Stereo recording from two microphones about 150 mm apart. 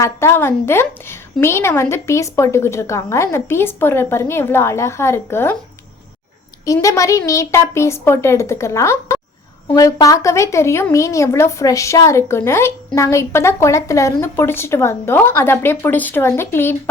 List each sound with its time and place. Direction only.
0.0 s a woman's voice: 20° left (ahead or behind)
6.8 s a woman's voice: 20° left (ahead or behind)